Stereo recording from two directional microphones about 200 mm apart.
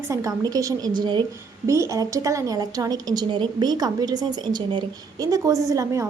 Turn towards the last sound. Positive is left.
turn(degrees=-15)  # may be behind; listen again after turning